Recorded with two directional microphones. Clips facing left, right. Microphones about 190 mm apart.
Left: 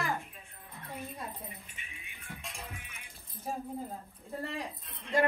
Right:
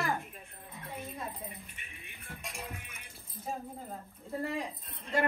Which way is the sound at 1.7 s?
50° right (ahead or behind).